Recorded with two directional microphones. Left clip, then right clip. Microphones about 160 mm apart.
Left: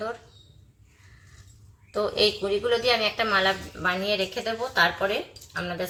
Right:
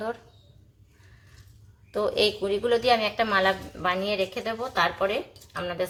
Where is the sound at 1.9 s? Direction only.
40° right (ahead or behind); by 4.3 s 25° right (ahead or behind).